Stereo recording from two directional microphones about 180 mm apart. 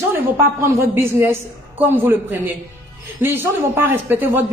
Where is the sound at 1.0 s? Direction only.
10° right (ahead or behind).